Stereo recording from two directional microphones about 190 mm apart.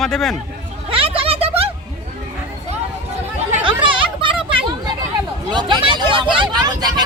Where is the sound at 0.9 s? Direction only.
30° right (ahead or behind).